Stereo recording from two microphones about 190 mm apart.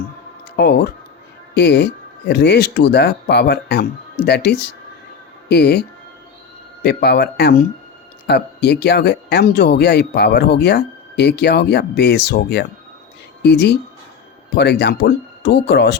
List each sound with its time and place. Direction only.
0.5 s speech: 55° left (ahead or behind)
6.8 s speech: 60° left (ahead or behind)